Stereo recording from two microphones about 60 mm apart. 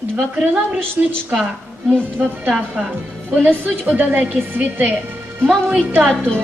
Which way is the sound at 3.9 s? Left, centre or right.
Right.